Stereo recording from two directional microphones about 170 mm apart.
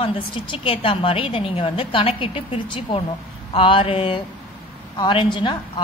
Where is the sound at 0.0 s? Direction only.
30° left (ahead or behind).